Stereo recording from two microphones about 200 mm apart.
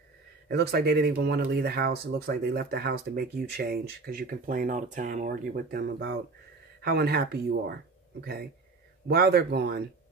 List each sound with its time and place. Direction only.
0.5 s speech: 55° right (ahead or behind)